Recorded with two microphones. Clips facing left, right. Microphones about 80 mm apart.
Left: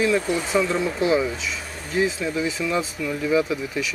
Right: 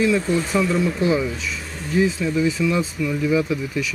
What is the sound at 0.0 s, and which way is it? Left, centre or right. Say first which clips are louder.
Speech: right 2 dB; centre.